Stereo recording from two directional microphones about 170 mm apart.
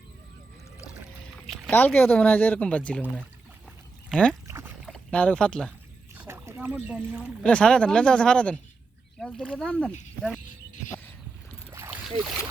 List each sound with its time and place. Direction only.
1.7 s speech: 10° left (ahead or behind)
4.1 s speech: 5° left (ahead or behind)
4.4 s boat: 15° right (ahead or behind)
4.9 s speech: 5° left (ahead or behind)
6.1 s a sound: 15° right (ahead or behind)
7.4 s speech: 5° left (ahead or behind)
11.7 s boat: 15° right (ahead or behind)